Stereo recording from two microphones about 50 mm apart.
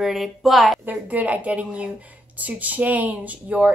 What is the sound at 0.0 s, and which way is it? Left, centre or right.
Speech, centre.